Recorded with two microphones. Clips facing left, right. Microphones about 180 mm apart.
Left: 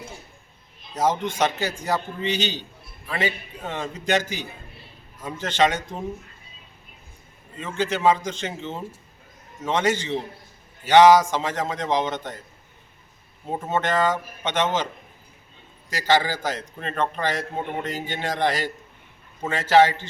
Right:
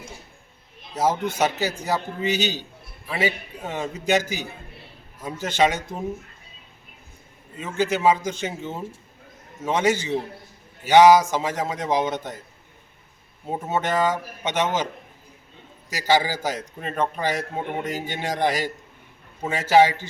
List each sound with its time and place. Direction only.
0.9 s a man's voice: 5° right (ahead or behind)
7.6 s a man's voice: 10° right (ahead or behind)
13.5 s a man's voice: 10° right (ahead or behind)
15.9 s a man's voice: 10° right (ahead or behind)